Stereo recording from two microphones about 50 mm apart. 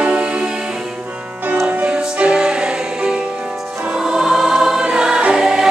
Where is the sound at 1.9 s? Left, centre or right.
Centre.